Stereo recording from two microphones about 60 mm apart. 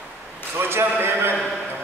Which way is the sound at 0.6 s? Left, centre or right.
Right.